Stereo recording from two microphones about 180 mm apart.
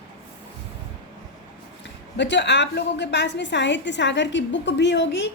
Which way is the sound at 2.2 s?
75° left (ahead or behind).